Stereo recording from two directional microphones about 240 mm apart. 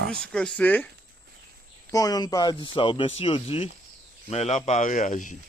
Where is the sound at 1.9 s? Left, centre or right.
Centre; by 5.4 s left.